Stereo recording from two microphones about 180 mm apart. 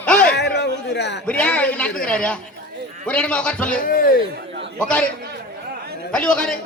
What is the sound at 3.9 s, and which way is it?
Speech, 50° left (ahead or behind).